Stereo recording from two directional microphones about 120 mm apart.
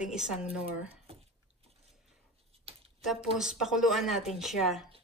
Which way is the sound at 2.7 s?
50° right (ahead or behind).